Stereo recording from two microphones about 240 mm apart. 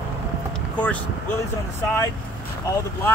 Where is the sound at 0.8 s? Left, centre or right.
Centre.